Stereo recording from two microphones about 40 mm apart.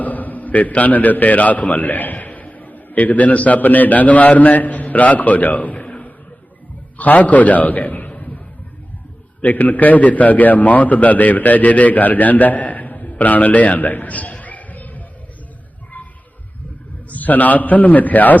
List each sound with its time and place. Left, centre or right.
0.0 s a man's voice: left
9.4 s a man's voice: left
17.1 s a man's voice: left